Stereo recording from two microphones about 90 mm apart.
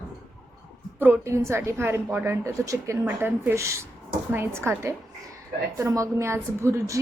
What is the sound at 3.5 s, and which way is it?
A woman's voice, 35° right (ahead or behind).